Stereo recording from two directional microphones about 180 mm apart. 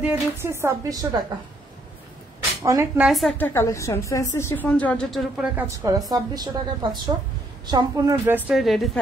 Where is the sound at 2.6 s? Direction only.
15° right (ahead or behind).